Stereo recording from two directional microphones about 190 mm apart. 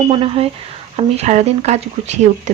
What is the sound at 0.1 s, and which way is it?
Speech, 30° right (ahead or behind).